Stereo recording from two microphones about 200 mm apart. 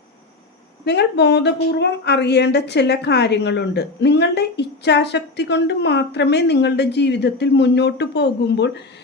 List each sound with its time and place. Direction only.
0.9 s speech: 55° left (ahead or behind)